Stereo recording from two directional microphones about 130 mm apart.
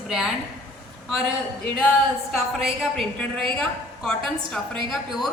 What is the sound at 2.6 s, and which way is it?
Speech, 5° right (ahead or behind).